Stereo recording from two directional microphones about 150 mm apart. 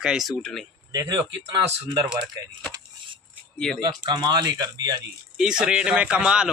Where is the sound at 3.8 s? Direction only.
30° right (ahead or behind).